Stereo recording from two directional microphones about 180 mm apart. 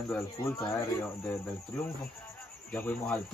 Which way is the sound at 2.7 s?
10° left (ahead or behind).